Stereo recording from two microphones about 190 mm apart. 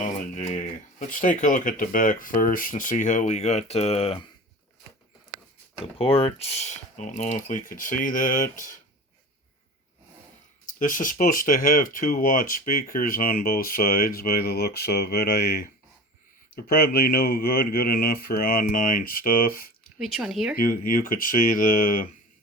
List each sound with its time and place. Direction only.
0.0 s speech: 40° left (ahead or behind)
5.8 s speech: 30° left (ahead or behind)
10.8 s speech: 45° left (ahead or behind)
20.0 s speech: centre (ahead or behind)
20.6 s speech: 45° left (ahead or behind)